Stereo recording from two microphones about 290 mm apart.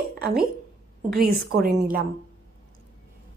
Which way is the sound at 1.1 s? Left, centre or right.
Right.